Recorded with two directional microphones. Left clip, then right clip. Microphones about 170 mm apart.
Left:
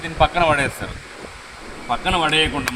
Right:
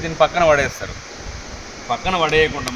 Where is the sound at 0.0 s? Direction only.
15° right (ahead or behind).